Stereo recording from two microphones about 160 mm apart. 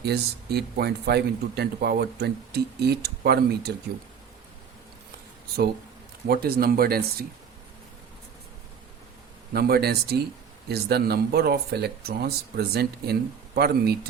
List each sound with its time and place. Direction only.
0.0 s speech: 90° right
6.2 s speech: 75° right (ahead or behind)
9.5 s speech: 75° right (ahead or behind)